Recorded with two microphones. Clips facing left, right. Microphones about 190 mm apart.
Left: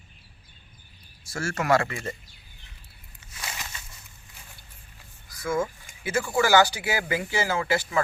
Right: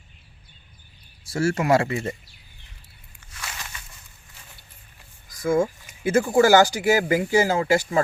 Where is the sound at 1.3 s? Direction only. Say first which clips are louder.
Right 4 dB; 30° right (ahead or behind).